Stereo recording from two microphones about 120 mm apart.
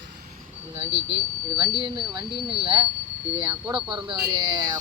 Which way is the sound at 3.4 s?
40° right (ahead or behind).